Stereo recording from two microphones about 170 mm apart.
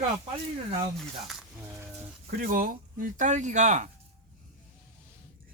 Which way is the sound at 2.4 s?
55° right (ahead or behind).